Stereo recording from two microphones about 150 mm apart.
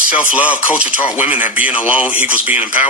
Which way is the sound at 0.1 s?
10° right (ahead or behind).